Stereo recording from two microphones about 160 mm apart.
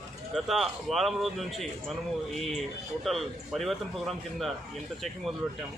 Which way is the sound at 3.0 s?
Centre (ahead or behind).